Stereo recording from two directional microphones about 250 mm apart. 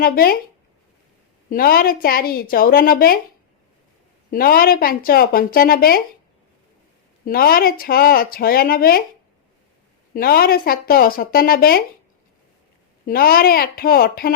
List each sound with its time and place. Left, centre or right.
0.0 s speech: left
1.5 s speech: left
4.3 s speech: left
7.3 s speech: left
10.2 s speech: left
13.1 s speech: left